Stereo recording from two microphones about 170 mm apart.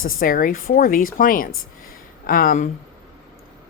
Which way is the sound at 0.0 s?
55° left (ahead or behind).